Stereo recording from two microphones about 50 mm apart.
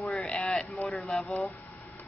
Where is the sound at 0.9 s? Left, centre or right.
Centre.